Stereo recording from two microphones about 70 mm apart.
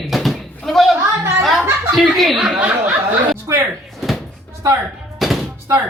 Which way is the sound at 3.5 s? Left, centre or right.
Right.